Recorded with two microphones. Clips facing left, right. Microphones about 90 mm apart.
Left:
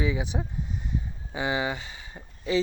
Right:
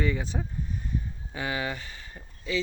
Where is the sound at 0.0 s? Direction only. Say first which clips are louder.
Left 1 dB; 15° left (ahead or behind).